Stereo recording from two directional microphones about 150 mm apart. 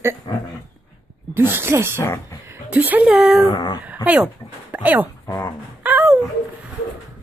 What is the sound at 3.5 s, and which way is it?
Speech, 30° left (ahead or behind).